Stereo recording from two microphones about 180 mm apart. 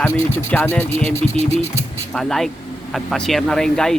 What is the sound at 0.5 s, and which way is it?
Speech, 10° left (ahead or behind).